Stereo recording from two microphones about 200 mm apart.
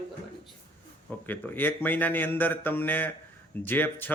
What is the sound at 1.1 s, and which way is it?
Speech, 10° left (ahead or behind).